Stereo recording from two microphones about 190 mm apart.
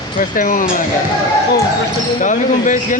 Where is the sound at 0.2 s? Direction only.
45° left (ahead or behind).